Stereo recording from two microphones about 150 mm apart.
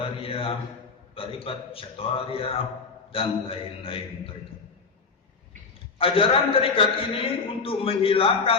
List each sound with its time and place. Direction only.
0.0 s mantra: 40° left (ahead or behind)
1.1 s a man's voice: 40° left (ahead or behind)
6.0 s a man's voice: 40° left (ahead or behind)